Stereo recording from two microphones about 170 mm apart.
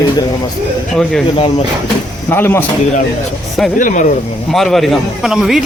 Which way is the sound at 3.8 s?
50° left (ahead or behind).